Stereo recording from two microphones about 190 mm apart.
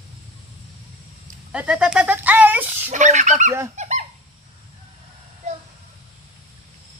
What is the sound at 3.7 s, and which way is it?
Goose, 40° right (ahead or behind).